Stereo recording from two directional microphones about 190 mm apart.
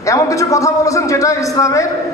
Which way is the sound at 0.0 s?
15° left (ahead or behind).